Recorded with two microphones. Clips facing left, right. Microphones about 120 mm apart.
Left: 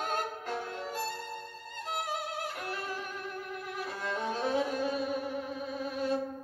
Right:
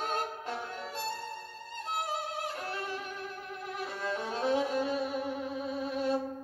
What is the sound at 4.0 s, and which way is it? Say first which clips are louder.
Music: even; 30° right (ahead or behind).